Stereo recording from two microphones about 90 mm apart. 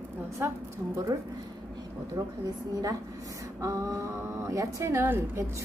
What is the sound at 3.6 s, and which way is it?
Speech, 35° right (ahead or behind).